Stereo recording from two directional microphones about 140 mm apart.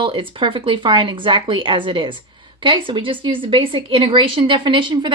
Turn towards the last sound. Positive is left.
turn(degrees=-35)  # may be behind; listen again after turning